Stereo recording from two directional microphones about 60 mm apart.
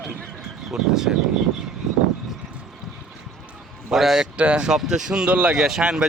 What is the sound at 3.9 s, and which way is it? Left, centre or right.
Speech, centre.